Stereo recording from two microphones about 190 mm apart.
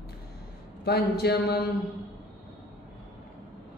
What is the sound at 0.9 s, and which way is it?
Mantra, 55° left (ahead or behind).